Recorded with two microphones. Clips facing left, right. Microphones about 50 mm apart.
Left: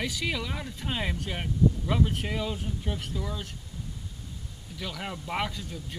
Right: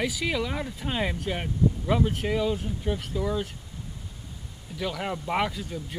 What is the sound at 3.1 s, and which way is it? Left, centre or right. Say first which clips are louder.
Speech: right 7 dB; centre.